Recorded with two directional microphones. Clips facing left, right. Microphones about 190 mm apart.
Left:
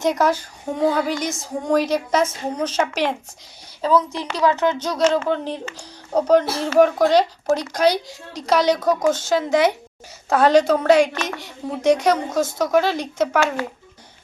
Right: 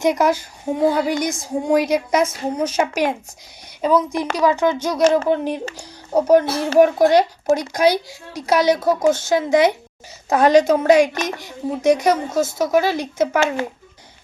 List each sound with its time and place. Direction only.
0.0 s a woman's voice: 10° right (ahead or behind)